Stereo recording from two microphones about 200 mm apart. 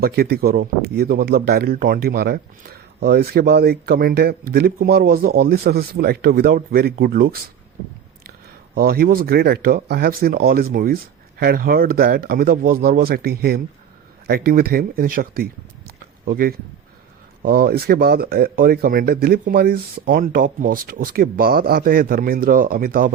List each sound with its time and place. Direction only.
0.0 s speech: 50° right (ahead or behind)
8.7 s speech: 50° right (ahead or behind)